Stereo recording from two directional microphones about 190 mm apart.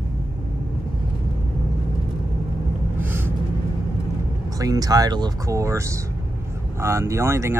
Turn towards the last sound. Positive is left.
turn(degrees=-15)  # may be behind; listen again after turning